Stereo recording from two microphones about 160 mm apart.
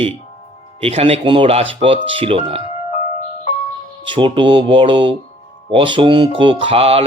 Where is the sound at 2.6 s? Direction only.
45° left (ahead or behind).